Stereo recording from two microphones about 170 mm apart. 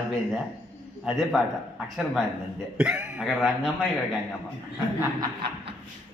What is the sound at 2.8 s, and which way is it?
Speech, 5° right (ahead or behind).